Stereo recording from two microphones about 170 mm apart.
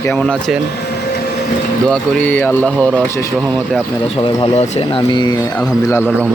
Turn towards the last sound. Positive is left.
turn(degrees=30)  # may be behind; listen again after turning